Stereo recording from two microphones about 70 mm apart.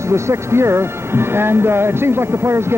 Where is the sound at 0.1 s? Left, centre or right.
Right.